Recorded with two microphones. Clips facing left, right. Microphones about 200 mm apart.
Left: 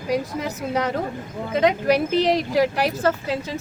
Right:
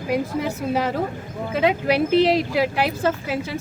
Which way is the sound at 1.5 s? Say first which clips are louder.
Left 1 dB; 5° right (ahead or behind).